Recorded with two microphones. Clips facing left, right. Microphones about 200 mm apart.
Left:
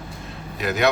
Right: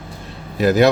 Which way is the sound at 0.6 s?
35° right (ahead or behind).